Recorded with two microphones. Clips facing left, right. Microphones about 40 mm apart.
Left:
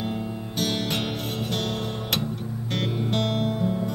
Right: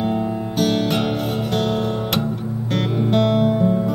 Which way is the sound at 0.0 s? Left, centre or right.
Centre.